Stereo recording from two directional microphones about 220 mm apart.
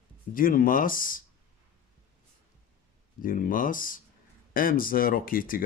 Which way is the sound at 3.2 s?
40° left (ahead or behind).